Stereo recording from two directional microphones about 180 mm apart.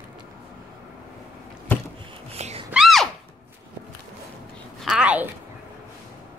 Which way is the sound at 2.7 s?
Centre (ahead or behind).